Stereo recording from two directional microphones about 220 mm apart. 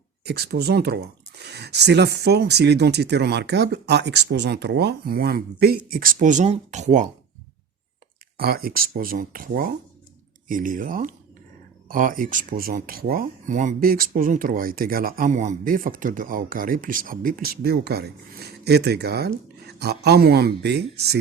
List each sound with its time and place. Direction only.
0.3 s speech: 45° right (ahead or behind); by 7.1 s 30° right (ahead or behind)
8.4 s speech: 45° right (ahead or behind)